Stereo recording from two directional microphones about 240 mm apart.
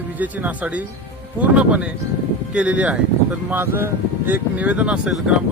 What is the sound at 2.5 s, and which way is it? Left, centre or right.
Speech, centre.